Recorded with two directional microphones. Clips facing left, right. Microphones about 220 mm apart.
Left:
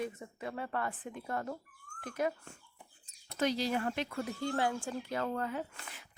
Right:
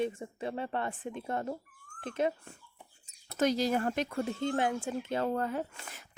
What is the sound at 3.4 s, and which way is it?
Speech, 45° right (ahead or behind).